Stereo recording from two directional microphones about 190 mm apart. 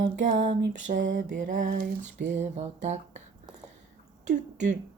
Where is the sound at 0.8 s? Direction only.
40° right (ahead or behind).